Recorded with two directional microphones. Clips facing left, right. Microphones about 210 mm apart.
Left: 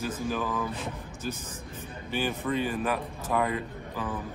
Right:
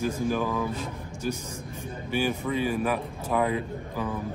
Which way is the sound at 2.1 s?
10° right (ahead or behind).